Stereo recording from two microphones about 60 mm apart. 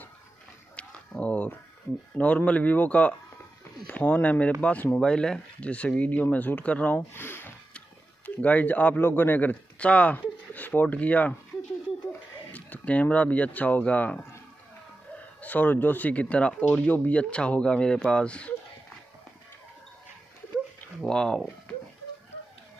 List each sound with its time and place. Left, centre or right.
0.7 s a sound: left
2.1 s speech: left
4.9 s speech: centre
7.2 s speech: left
8.4 s speech: left
12.5 s speech: left
15.4 s speech: left
21.1 s speech: centre